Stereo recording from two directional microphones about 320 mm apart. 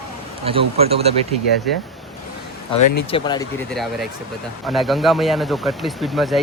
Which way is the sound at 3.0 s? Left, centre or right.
Centre.